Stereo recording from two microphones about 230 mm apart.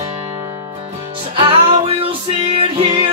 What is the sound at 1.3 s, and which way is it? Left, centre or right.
Music, right.